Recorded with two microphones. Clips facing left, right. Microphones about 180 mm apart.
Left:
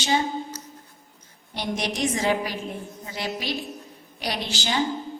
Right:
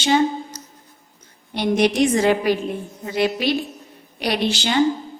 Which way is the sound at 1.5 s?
65° right (ahead or behind).